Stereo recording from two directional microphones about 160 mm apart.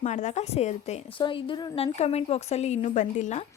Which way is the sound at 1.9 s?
40° left (ahead or behind).